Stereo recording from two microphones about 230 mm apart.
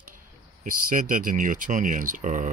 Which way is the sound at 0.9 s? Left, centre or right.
Right.